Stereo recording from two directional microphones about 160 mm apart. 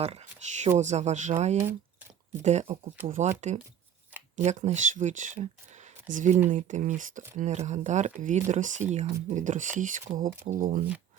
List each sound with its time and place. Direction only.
0.0 s speech: 40° right (ahead or behind)